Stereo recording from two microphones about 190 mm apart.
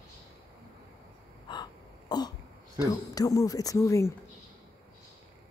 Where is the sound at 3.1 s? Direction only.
20° left (ahead or behind).